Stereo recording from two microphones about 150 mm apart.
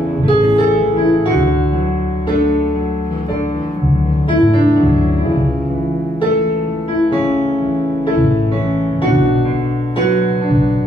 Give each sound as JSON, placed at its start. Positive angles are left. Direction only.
{"t": 4.3, "sound": "music", "side_deg": 35}